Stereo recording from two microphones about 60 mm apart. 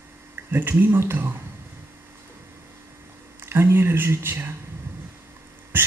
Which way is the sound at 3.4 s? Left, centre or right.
Right.